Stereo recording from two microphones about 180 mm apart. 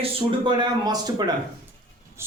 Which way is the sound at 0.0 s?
30° right (ahead or behind).